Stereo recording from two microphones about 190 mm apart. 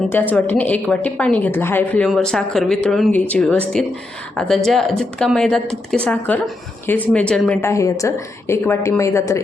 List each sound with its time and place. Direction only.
0.1 s a woman's voice: 10° left (ahead or behind)